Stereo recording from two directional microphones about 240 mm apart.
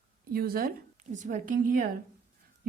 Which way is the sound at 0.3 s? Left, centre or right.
Right.